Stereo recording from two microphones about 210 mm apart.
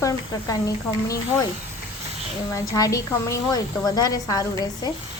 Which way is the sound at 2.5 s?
15° left (ahead or behind).